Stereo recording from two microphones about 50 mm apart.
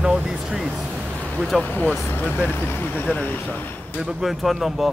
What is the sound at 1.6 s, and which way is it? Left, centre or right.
Speech, left.